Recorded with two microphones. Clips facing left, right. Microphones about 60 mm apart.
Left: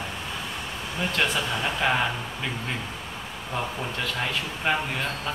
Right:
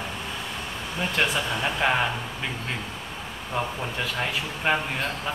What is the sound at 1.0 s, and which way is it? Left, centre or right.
Speech, centre.